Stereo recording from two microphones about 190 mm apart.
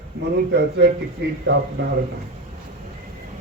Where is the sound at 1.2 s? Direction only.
60° right (ahead or behind).